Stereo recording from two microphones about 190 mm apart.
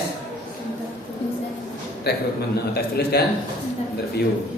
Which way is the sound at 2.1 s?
60° left (ahead or behind).